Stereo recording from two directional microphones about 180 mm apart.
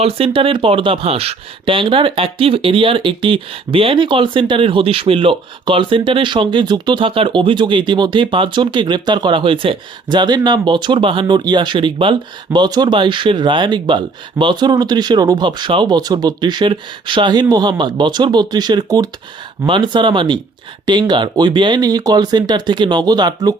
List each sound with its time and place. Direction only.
0.0 s speech: 30° right (ahead or behind)